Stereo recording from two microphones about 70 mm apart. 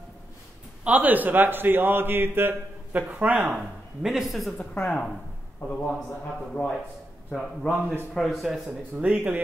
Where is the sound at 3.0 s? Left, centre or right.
Centre.